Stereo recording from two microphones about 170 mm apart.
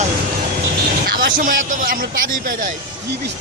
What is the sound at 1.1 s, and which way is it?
Speech, 55° right (ahead or behind).